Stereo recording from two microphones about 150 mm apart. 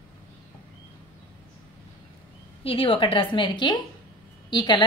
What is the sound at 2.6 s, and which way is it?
A woman's voice, 40° left (ahead or behind).